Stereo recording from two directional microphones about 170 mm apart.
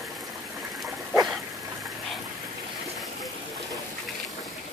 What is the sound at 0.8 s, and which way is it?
Dog, centre (ahead or behind).